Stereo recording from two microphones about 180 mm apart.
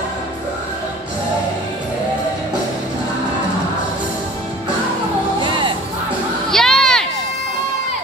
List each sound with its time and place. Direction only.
5.4 s music: 25° right (ahead or behind)
6.5 s children playing: centre (ahead or behind)